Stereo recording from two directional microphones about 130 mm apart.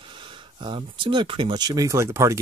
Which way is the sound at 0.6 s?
40° right (ahead or behind).